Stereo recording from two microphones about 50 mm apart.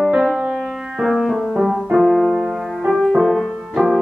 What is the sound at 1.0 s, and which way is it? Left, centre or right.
Music, centre.